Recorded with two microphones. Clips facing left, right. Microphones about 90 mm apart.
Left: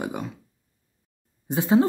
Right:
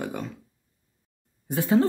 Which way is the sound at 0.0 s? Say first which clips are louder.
Left 2 dB; 15° left (ahead or behind).